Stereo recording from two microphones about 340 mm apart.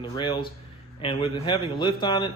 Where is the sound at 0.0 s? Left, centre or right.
Centre.